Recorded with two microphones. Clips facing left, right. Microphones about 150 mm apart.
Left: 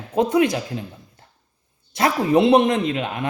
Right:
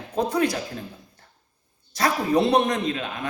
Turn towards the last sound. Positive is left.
turn(degrees=25)  # may be behind; listen again after turning